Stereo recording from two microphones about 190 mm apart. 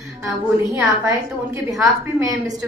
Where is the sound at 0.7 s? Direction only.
15° right (ahead or behind).